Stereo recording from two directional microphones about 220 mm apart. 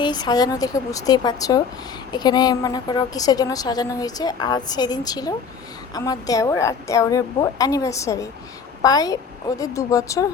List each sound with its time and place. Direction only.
0.0 s a woman's voice: 20° left (ahead or behind)